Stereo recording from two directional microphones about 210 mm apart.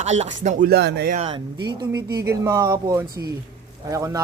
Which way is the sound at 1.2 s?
25° right (ahead or behind).